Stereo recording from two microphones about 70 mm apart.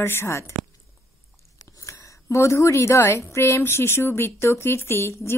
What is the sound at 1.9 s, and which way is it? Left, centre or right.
A woman's voice, left.